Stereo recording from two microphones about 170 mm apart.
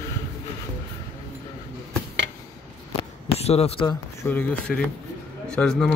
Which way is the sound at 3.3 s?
35° left (ahead or behind).